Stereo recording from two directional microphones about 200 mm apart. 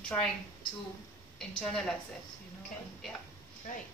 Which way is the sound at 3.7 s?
40° left (ahead or behind).